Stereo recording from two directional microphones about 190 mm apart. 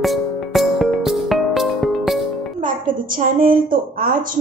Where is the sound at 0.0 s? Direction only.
Centre (ahead or behind).